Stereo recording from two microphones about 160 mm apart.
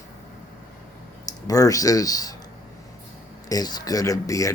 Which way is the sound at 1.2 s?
20° left (ahead or behind).